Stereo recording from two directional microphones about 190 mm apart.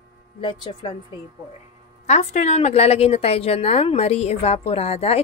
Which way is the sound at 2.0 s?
35° left (ahead or behind).